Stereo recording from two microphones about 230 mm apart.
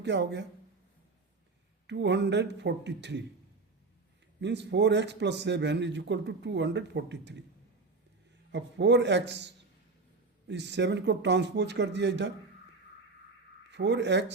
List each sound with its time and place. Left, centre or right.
0.0 s a man's voice: right
1.9 s a man's voice: right
4.4 s a man's voice: right
8.5 s a man's voice: right
10.5 s a man's voice: right
13.7 s speech: right